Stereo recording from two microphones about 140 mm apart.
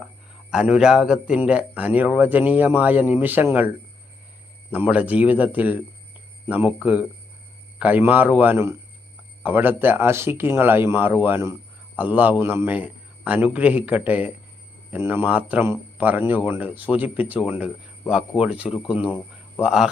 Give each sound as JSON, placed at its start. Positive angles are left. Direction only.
{"t": 0.5, "sound": "a man's voice", "side_deg": -5}